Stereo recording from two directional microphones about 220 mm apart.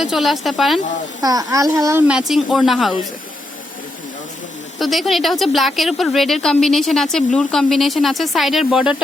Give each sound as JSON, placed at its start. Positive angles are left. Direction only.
{"t": 0.0, "sound": "a woman's voice", "side_deg": 0}
{"t": 1.2, "sound": "speech", "side_deg": -15}
{"t": 4.8, "sound": "a woman's voice", "side_deg": 0}